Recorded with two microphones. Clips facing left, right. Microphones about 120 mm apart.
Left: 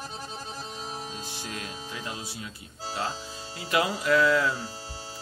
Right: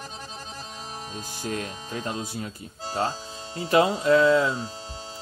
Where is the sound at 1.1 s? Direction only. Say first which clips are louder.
Right 6 dB; 45° right (ahead or behind).